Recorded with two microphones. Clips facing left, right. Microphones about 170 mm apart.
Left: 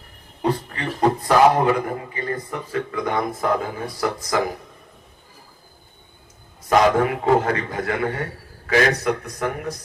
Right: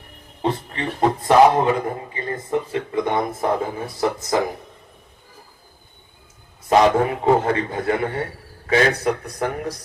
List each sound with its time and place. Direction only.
0.4 s a man's voice: 25° right (ahead or behind)
6.7 s a man's voice: 25° right (ahead or behind)